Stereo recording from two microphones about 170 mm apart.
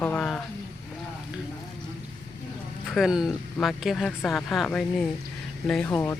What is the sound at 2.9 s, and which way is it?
Speech, centre (ahead or behind).